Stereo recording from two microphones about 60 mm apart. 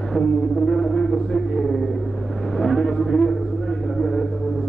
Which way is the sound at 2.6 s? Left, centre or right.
Centre.